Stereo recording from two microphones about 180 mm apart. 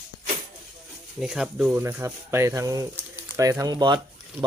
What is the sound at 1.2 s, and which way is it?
Speech, 5° right (ahead or behind).